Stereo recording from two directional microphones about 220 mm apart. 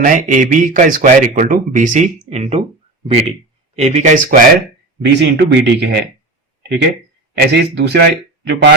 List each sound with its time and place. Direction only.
0.0 s speech: 35° right (ahead or behind)
5.0 s speech: 50° right (ahead or behind)
7.5 s speech: 50° right (ahead or behind)